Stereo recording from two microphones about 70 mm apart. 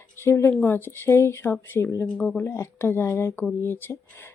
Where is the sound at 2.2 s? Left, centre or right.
Centre.